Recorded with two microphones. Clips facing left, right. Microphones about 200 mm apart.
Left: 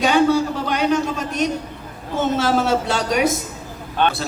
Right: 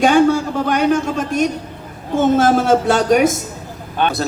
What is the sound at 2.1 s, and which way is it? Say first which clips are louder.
A man's voice: right 5 dB; 50° right (ahead or behind).